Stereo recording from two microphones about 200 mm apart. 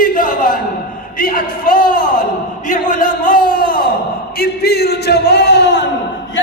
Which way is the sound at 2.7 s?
45° left (ahead or behind).